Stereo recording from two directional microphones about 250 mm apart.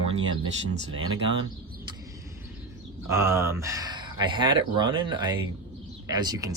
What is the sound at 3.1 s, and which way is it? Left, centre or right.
Speech, centre.